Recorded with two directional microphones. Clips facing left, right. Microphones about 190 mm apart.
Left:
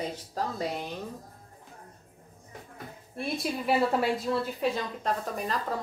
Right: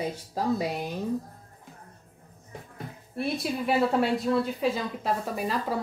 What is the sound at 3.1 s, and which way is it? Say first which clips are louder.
A woman's voice: right 3 dB; centre (ahead or behind).